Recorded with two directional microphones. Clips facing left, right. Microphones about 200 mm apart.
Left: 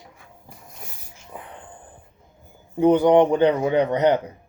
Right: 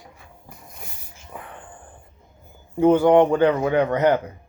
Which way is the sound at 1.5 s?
20° left (ahead or behind).